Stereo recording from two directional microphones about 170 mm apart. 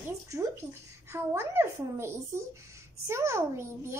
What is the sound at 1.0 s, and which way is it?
A child's voice, 15° right (ahead or behind).